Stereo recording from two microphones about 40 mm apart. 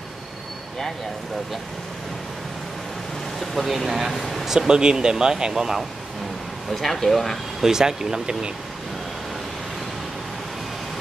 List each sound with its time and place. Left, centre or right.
3.3 s speech: centre
4.2 s a sound: centre
4.5 s speech: centre
6.7 s speech: centre
7.6 s speech: centre